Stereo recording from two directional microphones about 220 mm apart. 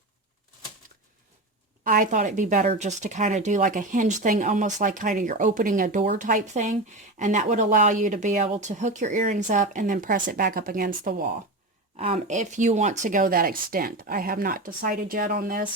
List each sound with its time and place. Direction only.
1.8 s speech: 40° right (ahead or behind)
11.9 s speech: 25° right (ahead or behind)